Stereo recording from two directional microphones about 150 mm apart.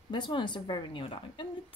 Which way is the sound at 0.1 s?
30° left (ahead or behind).